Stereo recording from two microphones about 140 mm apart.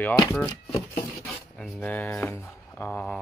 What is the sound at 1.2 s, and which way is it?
Speech, centre (ahead or behind).